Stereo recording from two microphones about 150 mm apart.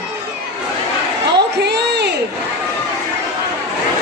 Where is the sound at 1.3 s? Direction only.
90° right.